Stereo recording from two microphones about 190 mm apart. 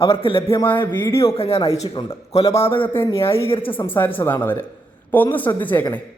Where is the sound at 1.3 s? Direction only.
30° left (ahead or behind).